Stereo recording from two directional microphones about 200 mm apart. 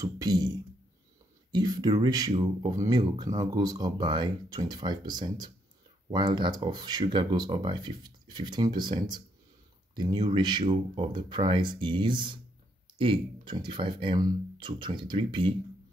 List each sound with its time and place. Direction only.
0.0 s speech: 20° right (ahead or behind)
1.5 s speech: 20° right (ahead or behind)